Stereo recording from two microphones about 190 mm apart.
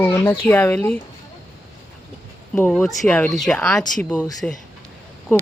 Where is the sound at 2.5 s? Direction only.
10° left (ahead or behind).